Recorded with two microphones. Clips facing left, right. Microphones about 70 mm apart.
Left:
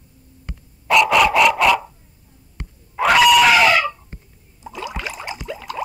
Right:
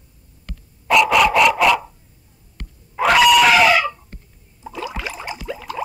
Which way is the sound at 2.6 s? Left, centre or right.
Centre.